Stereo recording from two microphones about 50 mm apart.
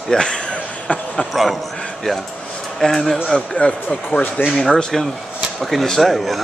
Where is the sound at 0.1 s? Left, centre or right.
Centre.